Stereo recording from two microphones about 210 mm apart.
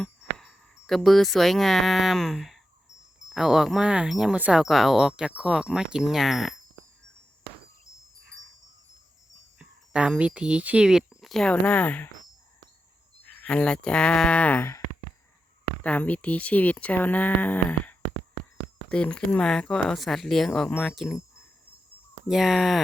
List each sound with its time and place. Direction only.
0.0 s speech: centre (ahead or behind)
9.6 s speech: 5° right (ahead or behind)
13.2 s speech: 5° left (ahead or behind)
15.8 s speech: 5° left (ahead or behind)
22.3 s speech: centre (ahead or behind)